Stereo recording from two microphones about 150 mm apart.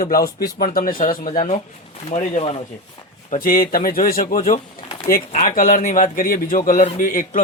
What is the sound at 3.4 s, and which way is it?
A man's voice, 70° left (ahead or behind).